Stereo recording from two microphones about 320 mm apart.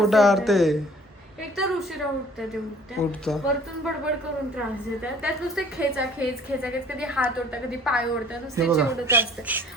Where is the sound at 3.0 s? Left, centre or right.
Centre.